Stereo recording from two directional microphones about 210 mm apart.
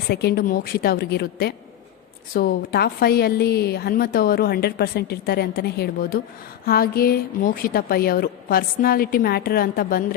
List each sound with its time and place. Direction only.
0.1 s a woman's voice: 50° left (ahead or behind)